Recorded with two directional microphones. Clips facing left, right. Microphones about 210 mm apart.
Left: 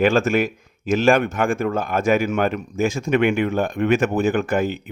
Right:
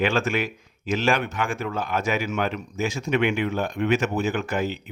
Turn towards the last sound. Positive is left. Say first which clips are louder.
# left 5 dB
turn(degrees=50)  # may be behind; listen again after turning